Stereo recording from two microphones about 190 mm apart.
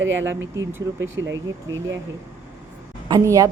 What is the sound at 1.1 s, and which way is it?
Speech, 80° right.